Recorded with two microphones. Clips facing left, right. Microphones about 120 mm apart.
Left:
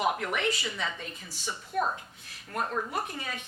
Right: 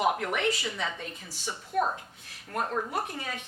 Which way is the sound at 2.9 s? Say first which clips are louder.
Right 1 dB; 45° right (ahead or behind).